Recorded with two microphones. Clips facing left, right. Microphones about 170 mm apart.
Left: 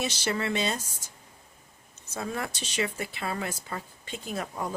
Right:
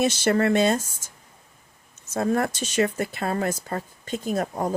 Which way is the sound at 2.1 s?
50° right (ahead or behind).